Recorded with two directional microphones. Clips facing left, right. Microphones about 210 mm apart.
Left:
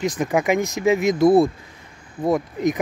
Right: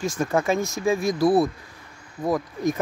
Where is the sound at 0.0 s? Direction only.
20° left (ahead or behind).